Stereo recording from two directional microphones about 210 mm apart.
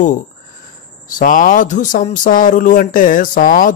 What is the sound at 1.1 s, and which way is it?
Speech, 40° left (ahead or behind).